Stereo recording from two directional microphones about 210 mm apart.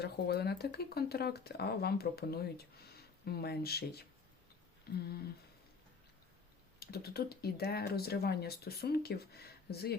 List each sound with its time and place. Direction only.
0.0 s speech: 50° left (ahead or behind)
6.7 s speech: 50° left (ahead or behind)